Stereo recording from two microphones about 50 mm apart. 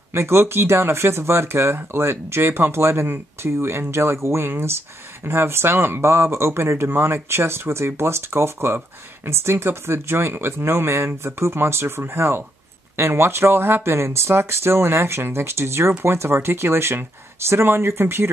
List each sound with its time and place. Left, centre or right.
0.1 s speech: right
6.0 s speech: right
13.9 s speech: right